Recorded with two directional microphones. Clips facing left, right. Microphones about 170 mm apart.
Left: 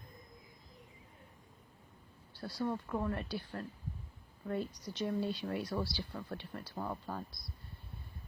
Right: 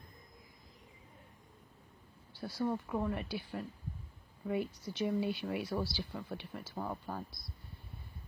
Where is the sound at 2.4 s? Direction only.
Centre (ahead or behind).